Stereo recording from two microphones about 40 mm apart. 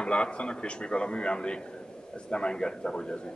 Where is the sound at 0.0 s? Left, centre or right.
Left.